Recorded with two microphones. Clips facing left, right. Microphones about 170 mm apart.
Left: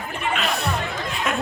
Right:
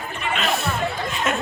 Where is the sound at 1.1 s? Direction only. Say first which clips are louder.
Left 1 dB; centre (ahead or behind).